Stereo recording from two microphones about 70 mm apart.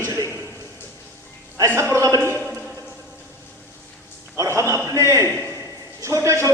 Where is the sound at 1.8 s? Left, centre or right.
Right.